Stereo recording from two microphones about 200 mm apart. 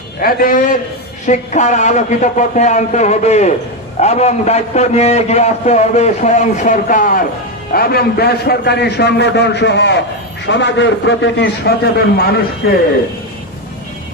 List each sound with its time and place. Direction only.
0.2 s a man's voice: 45° left (ahead or behind)